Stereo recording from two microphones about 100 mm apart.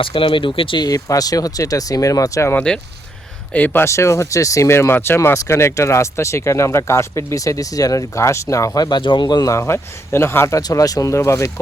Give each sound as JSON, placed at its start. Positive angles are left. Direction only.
{"t": 0.0, "sound": "speech", "side_deg": 60}
{"t": 0.9, "sound": "speech", "side_deg": 35}
{"t": 3.5, "sound": "speech", "side_deg": 20}
{"t": 9.5, "sound": "speech", "side_deg": 25}